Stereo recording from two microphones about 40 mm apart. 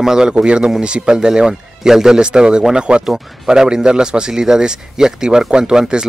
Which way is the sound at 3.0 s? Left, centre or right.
Centre.